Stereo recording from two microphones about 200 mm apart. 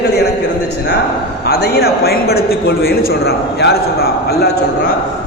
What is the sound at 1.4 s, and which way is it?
A man's voice, 55° left (ahead or behind).